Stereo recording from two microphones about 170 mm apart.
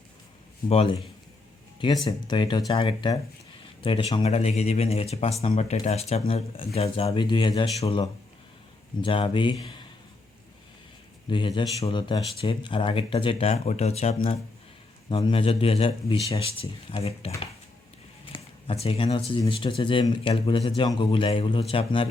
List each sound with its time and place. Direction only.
0.7 s speech: 35° left (ahead or behind)
2.0 s speech: 25° left (ahead or behind)
11.3 s speech: 30° left (ahead or behind)